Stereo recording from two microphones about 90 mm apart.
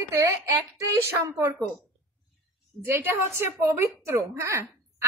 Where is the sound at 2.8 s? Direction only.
25° right (ahead or behind).